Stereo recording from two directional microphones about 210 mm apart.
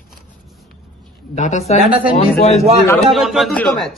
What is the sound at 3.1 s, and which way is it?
Speech, centre (ahead or behind).